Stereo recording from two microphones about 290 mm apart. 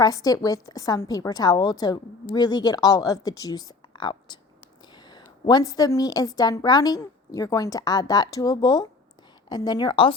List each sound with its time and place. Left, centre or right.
0.0 s a woman's voice: centre